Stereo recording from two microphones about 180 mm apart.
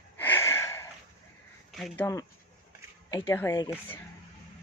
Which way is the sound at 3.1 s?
15° left (ahead or behind).